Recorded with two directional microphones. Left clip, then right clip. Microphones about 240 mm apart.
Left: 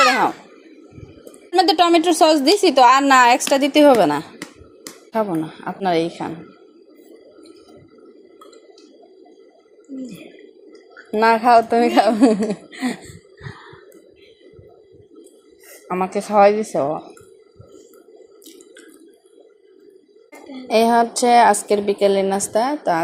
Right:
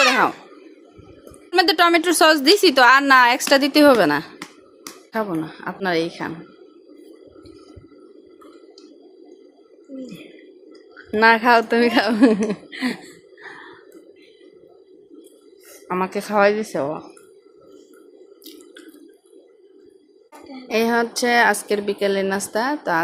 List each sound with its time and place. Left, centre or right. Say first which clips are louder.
0.0 s a sound: left 1 dB; right
1.5 s a woman's voice: left 1 dB; centre
11.1 s a woman's voice: left 1 dB; centre
15.9 s a woman's voice: left 2 dB; centre
20.7 s a woman's voice: left 5 dB; centre